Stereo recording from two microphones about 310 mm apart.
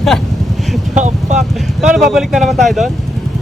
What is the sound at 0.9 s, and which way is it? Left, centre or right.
Speech, right.